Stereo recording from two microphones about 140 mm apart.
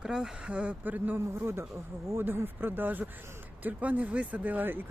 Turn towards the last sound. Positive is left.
turn(degrees=-15)  # may be behind; listen again after turning